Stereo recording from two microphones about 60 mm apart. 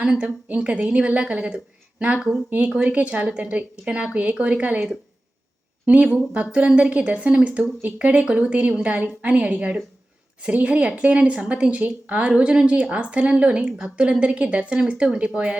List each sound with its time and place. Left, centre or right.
0.2 s a woman's voice: right
5.8 s a woman's voice: right